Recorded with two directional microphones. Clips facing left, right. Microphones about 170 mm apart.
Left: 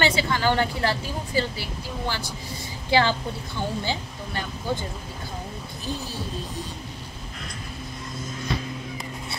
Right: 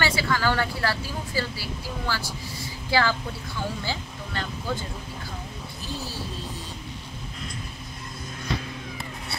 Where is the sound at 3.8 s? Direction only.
20° left (ahead or behind).